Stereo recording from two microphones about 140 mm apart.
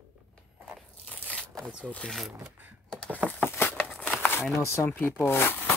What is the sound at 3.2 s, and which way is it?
Patter, 15° left (ahead or behind).